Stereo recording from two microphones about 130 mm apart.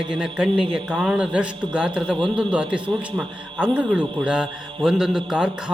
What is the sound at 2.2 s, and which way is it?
Speech, 40° right (ahead or behind).